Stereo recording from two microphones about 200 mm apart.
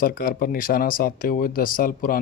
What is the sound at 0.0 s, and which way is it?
Speech, 45° left (ahead or behind).